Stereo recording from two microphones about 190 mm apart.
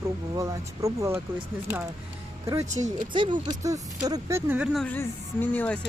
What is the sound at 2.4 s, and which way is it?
Speech, 15° right (ahead or behind).